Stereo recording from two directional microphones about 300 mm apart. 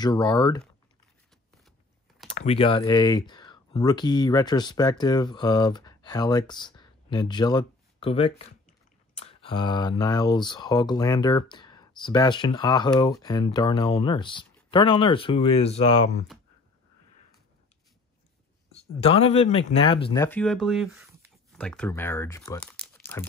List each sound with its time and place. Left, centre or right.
0.0 s speech: centre
2.3 s speech: left
18.9 s speech: centre